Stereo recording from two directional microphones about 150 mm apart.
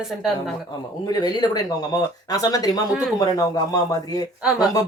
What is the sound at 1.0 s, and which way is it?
Speech, 25° left (ahead or behind).